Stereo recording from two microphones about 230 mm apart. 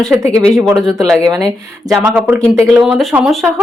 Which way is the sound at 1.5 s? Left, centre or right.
Centre.